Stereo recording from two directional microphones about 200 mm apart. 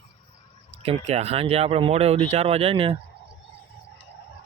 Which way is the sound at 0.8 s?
30° right (ahead or behind).